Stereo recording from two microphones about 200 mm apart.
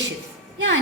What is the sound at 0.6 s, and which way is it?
Speech, 70° right (ahead or behind).